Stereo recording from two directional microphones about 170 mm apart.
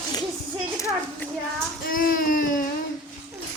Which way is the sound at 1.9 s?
55° left (ahead or behind).